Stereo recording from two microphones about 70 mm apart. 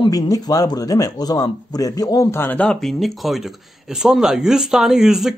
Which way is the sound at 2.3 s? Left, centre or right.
Left.